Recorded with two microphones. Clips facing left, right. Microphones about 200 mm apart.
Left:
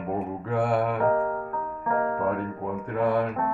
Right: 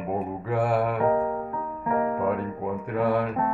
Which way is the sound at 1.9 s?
15° right (ahead or behind).